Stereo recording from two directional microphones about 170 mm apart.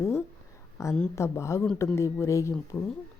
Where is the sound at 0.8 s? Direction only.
15° left (ahead or behind).